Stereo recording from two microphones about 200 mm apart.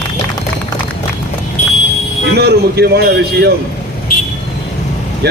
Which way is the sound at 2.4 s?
55° right (ahead or behind).